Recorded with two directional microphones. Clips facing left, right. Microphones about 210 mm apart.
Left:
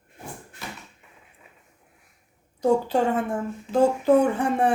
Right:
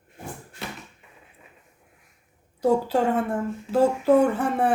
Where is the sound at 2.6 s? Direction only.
5° right (ahead or behind).